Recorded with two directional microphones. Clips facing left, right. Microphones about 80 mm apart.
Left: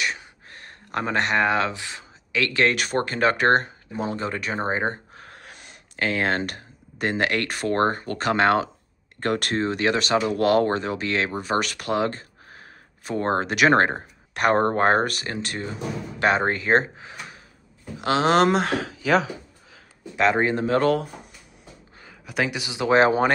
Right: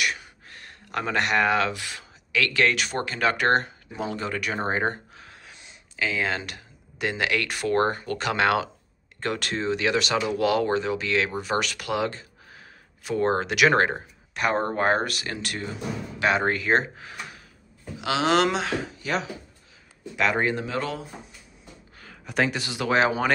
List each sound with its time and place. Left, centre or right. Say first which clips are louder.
0.0 s a sound: even; left
2.7 s speech: left 3 dB; left
5.1 s speech: left 3 dB; left
9.2 s speech: left 4 dB; left
14.3 s speech: left 5 dB; left
18.0 s speech: left 3 dB; left
20.2 s speech: left 3 dB; left
20.6 s speech: left 9 dB; left
22.1 s speech: right 1 dB; centre
22.6 s speech: left 4 dB; centre
22.9 s speech: left 4 dB; left